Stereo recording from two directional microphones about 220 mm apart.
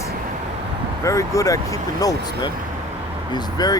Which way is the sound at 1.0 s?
15° left (ahead or behind).